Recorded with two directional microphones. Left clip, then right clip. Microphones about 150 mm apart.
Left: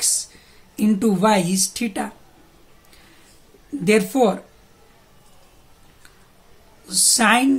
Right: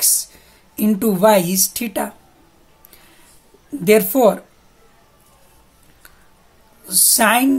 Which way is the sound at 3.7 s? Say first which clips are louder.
Right 4 dB; 45° right (ahead or behind).